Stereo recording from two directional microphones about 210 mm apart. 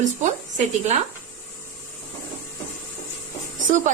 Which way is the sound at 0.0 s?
35° right (ahead or behind).